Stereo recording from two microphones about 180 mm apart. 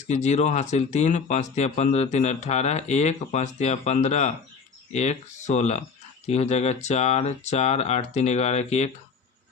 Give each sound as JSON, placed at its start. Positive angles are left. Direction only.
{"t": 0.1, "sound": "speech", "side_deg": 40}